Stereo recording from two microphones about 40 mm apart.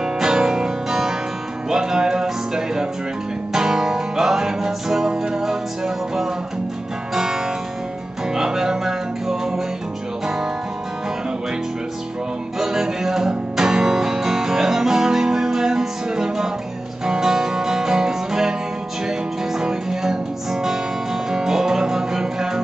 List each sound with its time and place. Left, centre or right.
0.0 s music: centre
12.5 s music: centre